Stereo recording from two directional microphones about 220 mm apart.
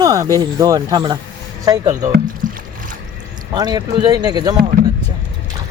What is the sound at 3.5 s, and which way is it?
Speech, 20° right (ahead or behind).